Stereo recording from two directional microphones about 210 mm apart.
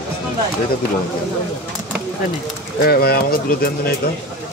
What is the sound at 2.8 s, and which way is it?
Speech, 45° left (ahead or behind).